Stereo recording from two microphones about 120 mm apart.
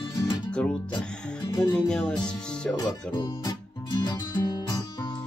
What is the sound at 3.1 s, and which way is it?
Music, 35° left (ahead or behind).